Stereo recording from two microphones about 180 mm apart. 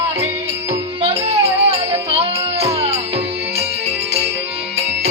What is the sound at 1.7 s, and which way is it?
Music, 35° right (ahead or behind).